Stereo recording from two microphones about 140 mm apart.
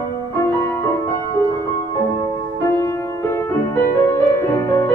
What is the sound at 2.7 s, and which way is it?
Music, 15° left (ahead or behind).